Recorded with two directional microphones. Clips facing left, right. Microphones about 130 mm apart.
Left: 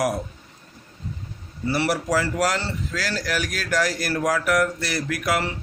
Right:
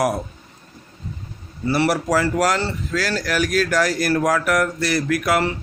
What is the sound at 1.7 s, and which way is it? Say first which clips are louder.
Speech: right 4 dB; 60° right (ahead or behind).